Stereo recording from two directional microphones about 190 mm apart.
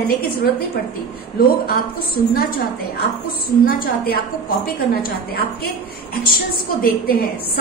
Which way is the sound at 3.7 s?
50° left (ahead or behind).